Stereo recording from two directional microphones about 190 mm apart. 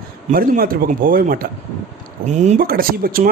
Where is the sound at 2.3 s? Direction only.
40° right (ahead or behind).